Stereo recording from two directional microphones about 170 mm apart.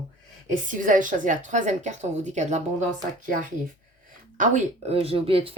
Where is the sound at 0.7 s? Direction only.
50° right (ahead or behind).